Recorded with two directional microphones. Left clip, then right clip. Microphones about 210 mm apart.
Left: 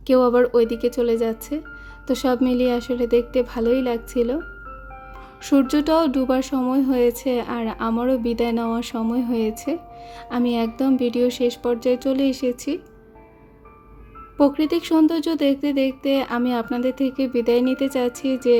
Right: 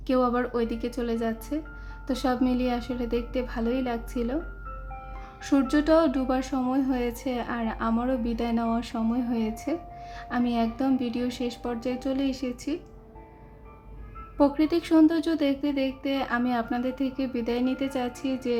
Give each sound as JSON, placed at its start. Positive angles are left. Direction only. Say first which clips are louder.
{"t": 0.1, "sound": "speech", "louder": "left 9 dB", "side_deg": 30}
{"t": 5.4, "sound": "speech", "louder": "left 5 dB", "side_deg": 25}
{"t": 14.3, "sound": "speech", "louder": "left 4 dB", "side_deg": 25}